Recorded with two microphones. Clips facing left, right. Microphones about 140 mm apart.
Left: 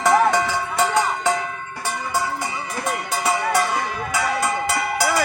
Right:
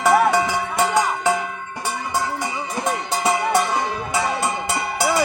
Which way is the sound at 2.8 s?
20° right (ahead or behind).